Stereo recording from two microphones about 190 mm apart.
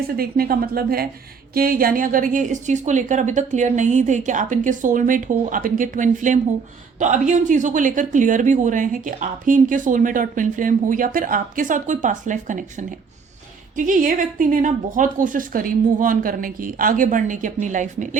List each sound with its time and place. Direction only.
0.2 s a woman's voice: 50° right (ahead or behind)